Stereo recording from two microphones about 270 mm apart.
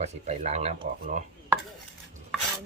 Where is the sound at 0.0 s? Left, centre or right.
Right.